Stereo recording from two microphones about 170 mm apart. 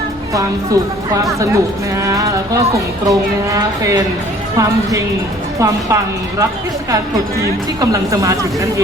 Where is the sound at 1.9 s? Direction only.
20° right (ahead or behind).